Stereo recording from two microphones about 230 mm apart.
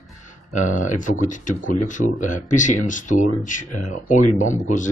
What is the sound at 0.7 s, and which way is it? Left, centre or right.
Speech, left.